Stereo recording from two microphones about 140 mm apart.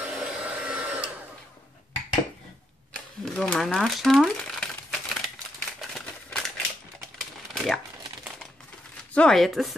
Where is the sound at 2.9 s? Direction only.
10° left (ahead or behind).